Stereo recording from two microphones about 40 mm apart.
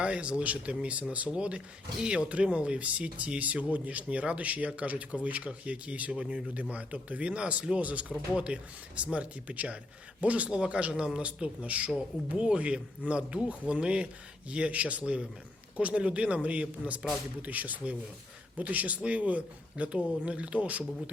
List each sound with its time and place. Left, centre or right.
0.0 s speech: right